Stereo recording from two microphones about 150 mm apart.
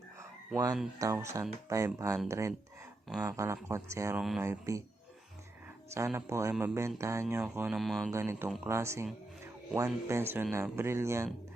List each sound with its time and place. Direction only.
0.5 s speech: 25° right (ahead or behind)
4.2 s speech: centre (ahead or behind)
4.4 s speech: 20° right (ahead or behind)
6.1 s speech: 15° right (ahead or behind)
7.8 s speech: centre (ahead or behind)
8.1 s speech: 15° right (ahead or behind)